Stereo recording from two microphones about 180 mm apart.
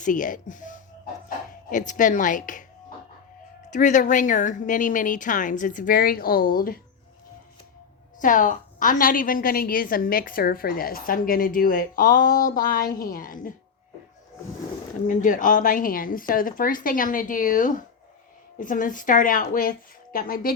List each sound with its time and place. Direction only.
0.0 s a woman's voice: 45° left (ahead or behind)
1.9 s a woman's voice: 45° left (ahead or behind)
3.7 s a woman's voice: 45° left (ahead or behind)
8.2 s a woman's voice: 45° left (ahead or behind)
15.0 s a woman's voice: 45° left (ahead or behind)